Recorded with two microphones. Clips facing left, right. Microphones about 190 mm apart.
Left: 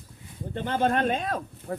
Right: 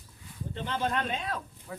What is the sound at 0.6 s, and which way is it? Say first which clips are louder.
Speech: left 7 dB; 50° left (ahead or behind).